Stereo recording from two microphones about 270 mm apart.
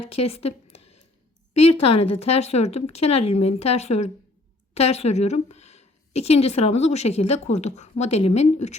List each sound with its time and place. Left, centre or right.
0.1 s a woman's voice: left